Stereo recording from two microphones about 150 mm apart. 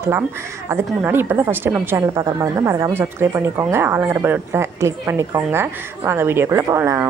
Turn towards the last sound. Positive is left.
turn(degrees=-15)  # may be behind; listen again after turning